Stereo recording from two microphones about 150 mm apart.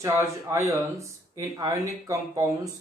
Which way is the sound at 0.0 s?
15° right (ahead or behind).